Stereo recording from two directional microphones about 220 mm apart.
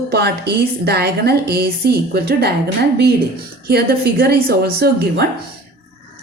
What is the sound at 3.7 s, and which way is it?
A woman's voice, 45° right (ahead or behind).